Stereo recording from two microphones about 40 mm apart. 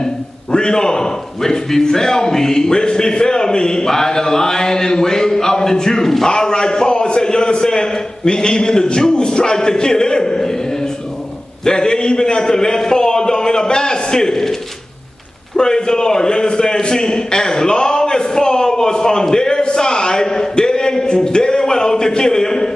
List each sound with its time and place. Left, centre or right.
0.0 s a man's voice: centre
11.6 s a man's voice: centre
15.5 s a man's voice: centre